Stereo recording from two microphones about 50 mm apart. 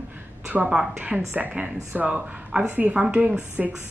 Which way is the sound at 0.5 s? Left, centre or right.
Right.